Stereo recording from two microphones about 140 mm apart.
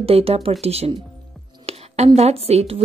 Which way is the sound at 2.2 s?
45° right (ahead or behind).